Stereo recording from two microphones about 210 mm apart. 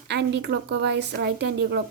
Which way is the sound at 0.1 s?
55° right (ahead or behind).